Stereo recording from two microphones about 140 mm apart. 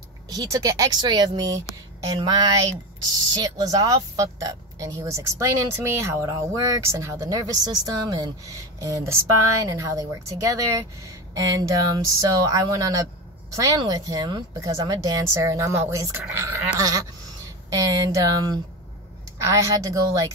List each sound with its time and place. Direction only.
0.3 s a woman's voice: 25° right (ahead or behind)